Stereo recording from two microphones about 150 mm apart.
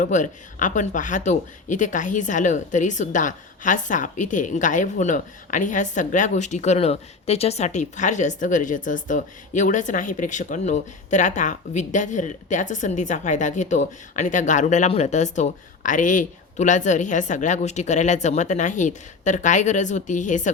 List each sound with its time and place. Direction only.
0.0 s speech: 55° left (ahead or behind)